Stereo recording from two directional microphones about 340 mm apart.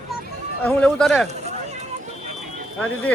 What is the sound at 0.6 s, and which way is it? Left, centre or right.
Speech, centre.